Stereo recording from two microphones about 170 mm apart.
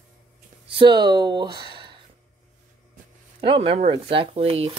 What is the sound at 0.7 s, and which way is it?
Speech, 30° right (ahead or behind).